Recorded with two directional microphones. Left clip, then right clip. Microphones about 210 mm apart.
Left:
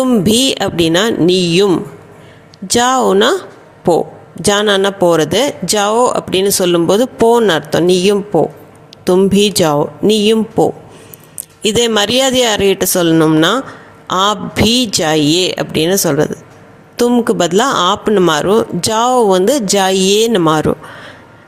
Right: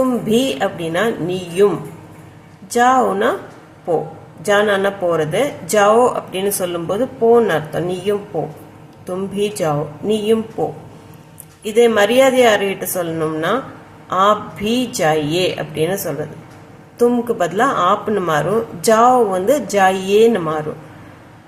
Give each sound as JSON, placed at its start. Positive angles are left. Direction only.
{"t": 0.3, "sound": "speech", "side_deg": 45}
{"t": 2.6, "sound": "speech", "side_deg": 45}
{"t": 4.4, "sound": "speech", "side_deg": 45}
{"t": 11.6, "sound": "speech", "side_deg": 45}